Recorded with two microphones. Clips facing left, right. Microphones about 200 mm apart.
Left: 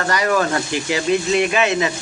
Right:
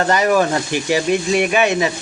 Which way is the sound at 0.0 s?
25° right (ahead or behind).